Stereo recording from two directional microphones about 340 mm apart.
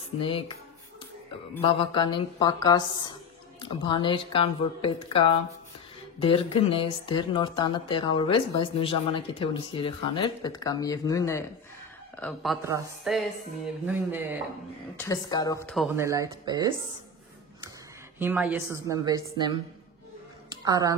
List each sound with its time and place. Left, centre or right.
1.6 s speech: centre
15.0 s speech: centre
18.2 s a woman's voice: centre
20.4 s a sound: centre